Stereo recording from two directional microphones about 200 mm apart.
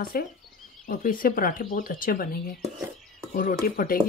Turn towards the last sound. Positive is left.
turn(degrees=45)  # may be behind; listen again after turning